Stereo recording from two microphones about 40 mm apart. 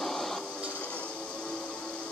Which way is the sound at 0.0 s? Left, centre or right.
Centre.